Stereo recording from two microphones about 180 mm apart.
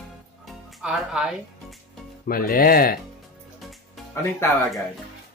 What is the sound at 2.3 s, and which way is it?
Speech, 55° left (ahead or behind).